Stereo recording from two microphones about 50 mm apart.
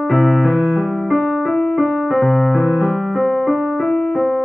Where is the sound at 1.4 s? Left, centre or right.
Centre.